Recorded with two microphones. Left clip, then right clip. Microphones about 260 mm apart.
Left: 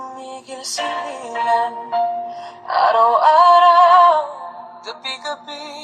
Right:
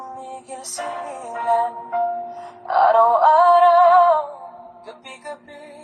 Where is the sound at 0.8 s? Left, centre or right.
Left.